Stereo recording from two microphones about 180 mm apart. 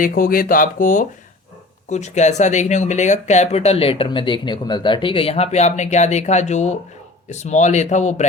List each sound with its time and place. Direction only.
0.0 s speech: 50° left (ahead or behind)